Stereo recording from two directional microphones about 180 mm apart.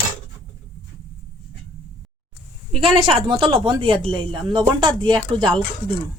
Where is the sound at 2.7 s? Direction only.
30° right (ahead or behind).